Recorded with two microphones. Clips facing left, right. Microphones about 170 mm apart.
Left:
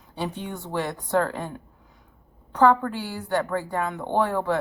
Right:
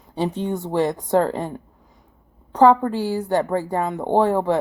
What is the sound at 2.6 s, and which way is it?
A woman's voice, 35° right (ahead or behind).